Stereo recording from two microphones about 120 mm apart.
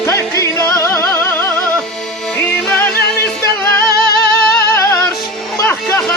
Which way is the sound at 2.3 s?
10° left (ahead or behind).